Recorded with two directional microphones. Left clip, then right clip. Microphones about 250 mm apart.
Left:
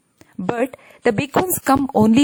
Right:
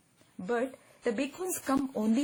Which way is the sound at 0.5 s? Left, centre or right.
Left.